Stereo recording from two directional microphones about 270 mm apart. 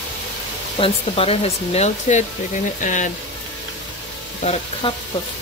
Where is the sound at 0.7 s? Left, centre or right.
Left.